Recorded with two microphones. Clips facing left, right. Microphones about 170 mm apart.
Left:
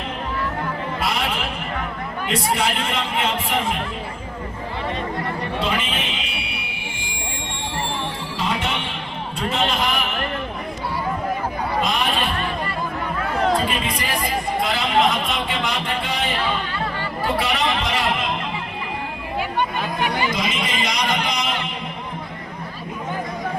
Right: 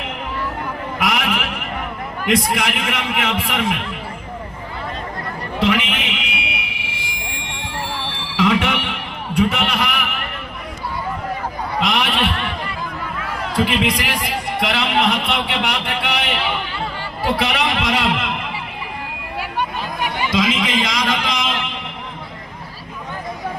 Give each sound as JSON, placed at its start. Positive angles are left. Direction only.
{"t": 0.9, "sound": "a sound", "side_deg": -80}
{"t": 2.2, "sound": "a man's voice", "side_deg": -75}
{"t": 5.5, "sound": "fire alarm", "side_deg": -75}
{"t": 8.1, "sound": "music", "side_deg": -75}
{"t": 9.5, "sound": "a man's voice", "side_deg": -70}
{"t": 11.8, "sound": "a sound", "side_deg": -80}
{"t": 13.7, "sound": "speech", "side_deg": -85}
{"t": 17.4, "sound": "a man's voice", "side_deg": -70}
{"t": 19.5, "sound": "chatter", "side_deg": -5}
{"t": 20.3, "sound": "music", "side_deg": -90}